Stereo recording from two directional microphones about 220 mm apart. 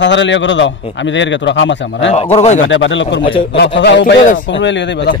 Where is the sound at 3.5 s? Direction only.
55° left (ahead or behind).